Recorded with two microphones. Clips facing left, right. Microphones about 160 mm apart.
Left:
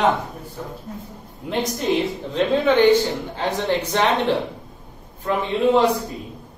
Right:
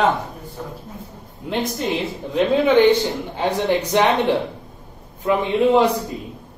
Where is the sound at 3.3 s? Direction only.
15° right (ahead or behind).